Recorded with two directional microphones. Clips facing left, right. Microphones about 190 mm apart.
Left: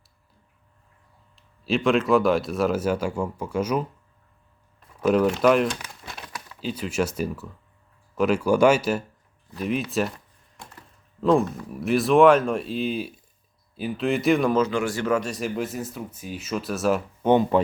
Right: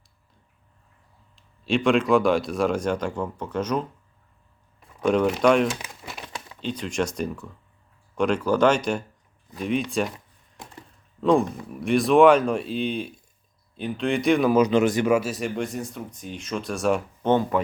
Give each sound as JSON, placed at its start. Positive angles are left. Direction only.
{"t": 1.4, "sound": "speech", "side_deg": 0}
{"t": 4.9, "sound": "speech", "side_deg": 5}
{"t": 6.2, "sound": "a sound", "side_deg": -25}
{"t": 6.6, "sound": "speech", "side_deg": 5}
{"t": 11.2, "sound": "speech", "side_deg": 0}
{"t": 14.5, "sound": "speech", "side_deg": -20}
{"t": 17.2, "sound": "speech", "side_deg": 15}